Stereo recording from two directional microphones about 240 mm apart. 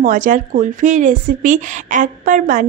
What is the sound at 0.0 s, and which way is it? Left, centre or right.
Speech, right.